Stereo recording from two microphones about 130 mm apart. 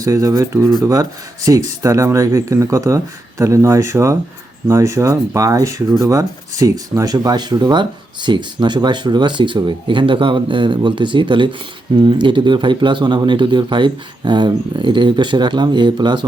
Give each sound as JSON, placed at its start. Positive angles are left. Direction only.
{"t": 0.0, "sound": "speech", "side_deg": -25}